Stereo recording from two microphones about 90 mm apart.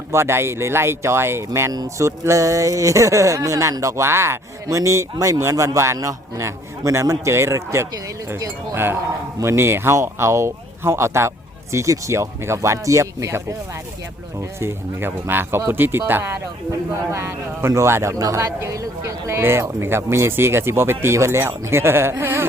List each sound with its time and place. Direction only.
0.1 s speech: 30° right (ahead or behind)
1.7 s a man's voice: 40° right (ahead or behind)
14.6 s a man's voice: 25° right (ahead or behind)